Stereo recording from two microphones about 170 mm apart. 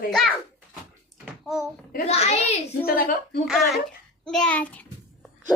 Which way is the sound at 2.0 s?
40° left (ahead or behind).